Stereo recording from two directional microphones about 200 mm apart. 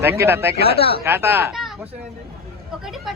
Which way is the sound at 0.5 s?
50° right (ahead or behind).